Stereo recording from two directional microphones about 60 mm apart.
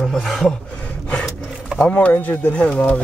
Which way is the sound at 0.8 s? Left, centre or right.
Left.